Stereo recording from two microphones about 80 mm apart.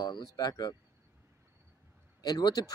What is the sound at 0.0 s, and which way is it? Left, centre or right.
Speech, left.